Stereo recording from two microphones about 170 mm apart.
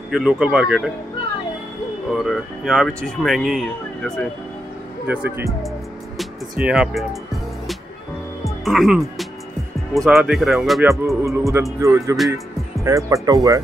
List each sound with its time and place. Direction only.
0.1 s speech: 5° right (ahead or behind)
2.2 s speech: centre (ahead or behind)
5.0 s music: 10° right (ahead or behind)
6.1 s speech: 5° right (ahead or behind)
8.6 s speech: centre (ahead or behind)
11.2 s music: 15° right (ahead or behind)
12.8 s speech: 20° right (ahead or behind)